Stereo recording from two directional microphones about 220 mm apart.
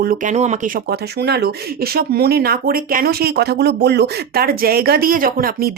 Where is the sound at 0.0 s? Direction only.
40° right (ahead or behind).